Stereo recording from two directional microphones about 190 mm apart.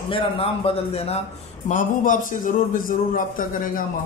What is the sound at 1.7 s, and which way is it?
A man's voice, 45° left (ahead or behind).